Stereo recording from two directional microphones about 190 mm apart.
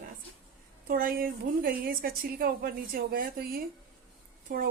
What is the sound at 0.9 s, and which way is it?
A woman's voice, 50° right (ahead or behind).